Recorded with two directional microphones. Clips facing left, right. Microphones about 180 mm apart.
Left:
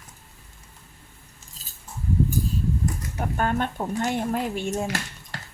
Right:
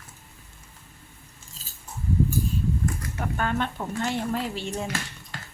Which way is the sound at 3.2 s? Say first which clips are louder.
Left 2 dB; 45° left (ahead or behind).